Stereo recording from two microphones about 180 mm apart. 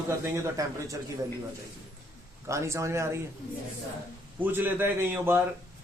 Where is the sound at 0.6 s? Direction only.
20° right (ahead or behind).